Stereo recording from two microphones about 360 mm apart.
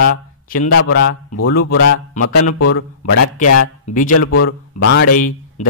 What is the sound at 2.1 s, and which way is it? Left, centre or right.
Speech, left.